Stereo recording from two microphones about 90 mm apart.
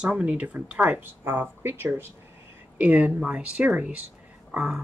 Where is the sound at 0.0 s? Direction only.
10° right (ahead or behind).